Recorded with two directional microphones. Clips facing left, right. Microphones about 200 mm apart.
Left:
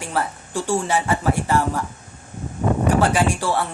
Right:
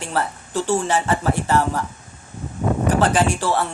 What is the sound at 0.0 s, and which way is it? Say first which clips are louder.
Speech: right 1 dB; 10° left (ahead or behind).